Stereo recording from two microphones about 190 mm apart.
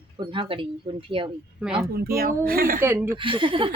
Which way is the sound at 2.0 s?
50° right (ahead or behind).